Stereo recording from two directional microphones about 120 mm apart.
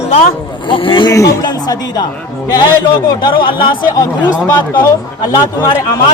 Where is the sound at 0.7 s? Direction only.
40° left (ahead or behind).